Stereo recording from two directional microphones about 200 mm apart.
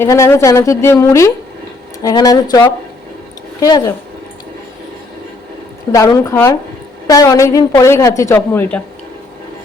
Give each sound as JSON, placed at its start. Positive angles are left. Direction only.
{"t": 0.0, "sound": "a woman's voice", "side_deg": 15}
{"t": 5.9, "sound": "a woman's voice", "side_deg": 15}